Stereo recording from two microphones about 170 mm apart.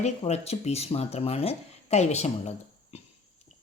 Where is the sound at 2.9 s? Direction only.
35° left (ahead or behind).